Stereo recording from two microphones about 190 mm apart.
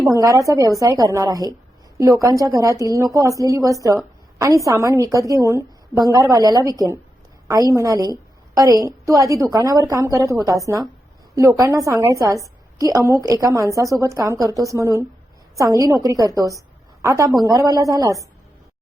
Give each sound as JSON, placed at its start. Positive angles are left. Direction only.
{"t": 0.1, "sound": "a woman's voice", "side_deg": -15}